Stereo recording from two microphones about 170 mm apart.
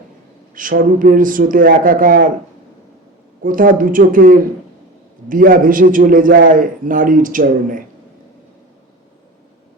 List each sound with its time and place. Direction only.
0.5 s a man's voice: 55° right (ahead or behind)
3.4 s a man's voice: 55° right (ahead or behind)